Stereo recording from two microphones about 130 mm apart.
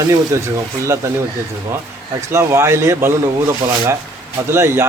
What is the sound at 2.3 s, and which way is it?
A man's voice, 20° right (ahead or behind).